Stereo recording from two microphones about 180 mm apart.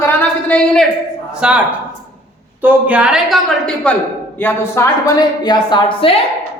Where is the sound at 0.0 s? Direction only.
10° left (ahead or behind).